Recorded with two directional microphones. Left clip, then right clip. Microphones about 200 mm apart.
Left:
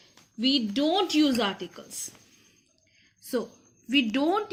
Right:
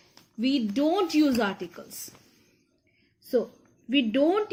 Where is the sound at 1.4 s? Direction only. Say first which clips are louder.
Even; 15° right (ahead or behind).